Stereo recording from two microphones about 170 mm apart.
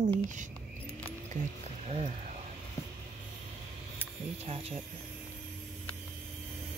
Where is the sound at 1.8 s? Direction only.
40° right (ahead or behind).